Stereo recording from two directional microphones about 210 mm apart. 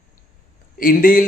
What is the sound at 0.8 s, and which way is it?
Speech, 45° left (ahead or behind).